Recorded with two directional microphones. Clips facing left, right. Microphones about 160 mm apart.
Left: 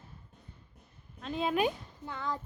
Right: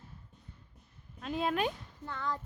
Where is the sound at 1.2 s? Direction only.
5° right (ahead or behind); by 2.3 s 15° left (ahead or behind).